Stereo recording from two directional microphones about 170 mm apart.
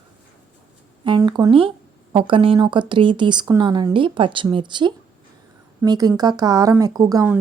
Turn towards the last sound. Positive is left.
turn(degrees=-20)  # may be behind; listen again after turning